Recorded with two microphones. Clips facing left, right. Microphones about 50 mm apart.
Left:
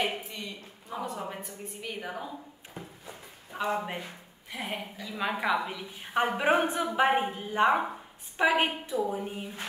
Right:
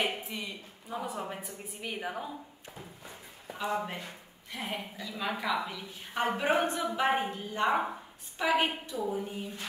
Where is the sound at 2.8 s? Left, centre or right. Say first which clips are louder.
Left 5 dB; left.